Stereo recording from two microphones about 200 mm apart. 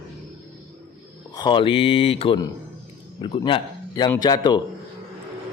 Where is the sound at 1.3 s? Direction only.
20° left (ahead or behind).